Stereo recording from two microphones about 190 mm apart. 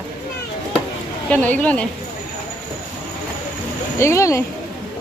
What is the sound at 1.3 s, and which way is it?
Speech, 5° left (ahead or behind).